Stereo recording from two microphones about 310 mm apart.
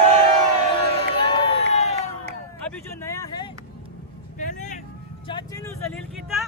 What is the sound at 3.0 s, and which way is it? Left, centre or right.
Vehicle, centre.